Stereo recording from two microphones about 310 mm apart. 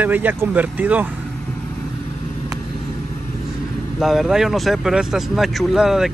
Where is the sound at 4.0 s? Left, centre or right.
Centre.